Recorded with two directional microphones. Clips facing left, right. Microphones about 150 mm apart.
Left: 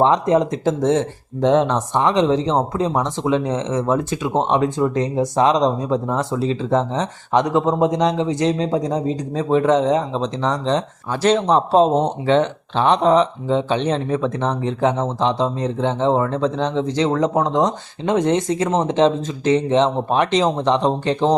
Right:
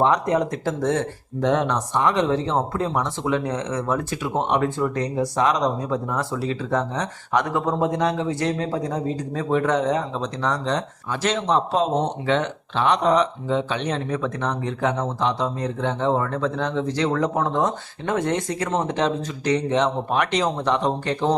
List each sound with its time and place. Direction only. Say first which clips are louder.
0.0 s speech: left 4 dB; 25° left (ahead or behind)
11.1 s speech: left 6 dB; 35° left (ahead or behind)